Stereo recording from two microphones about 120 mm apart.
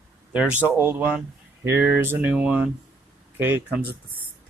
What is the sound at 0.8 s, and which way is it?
Speech, 20° right (ahead or behind).